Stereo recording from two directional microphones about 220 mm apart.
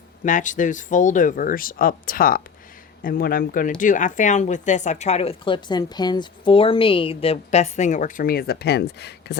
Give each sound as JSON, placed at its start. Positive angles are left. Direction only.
{"t": 0.3, "sound": "speech", "side_deg": 35}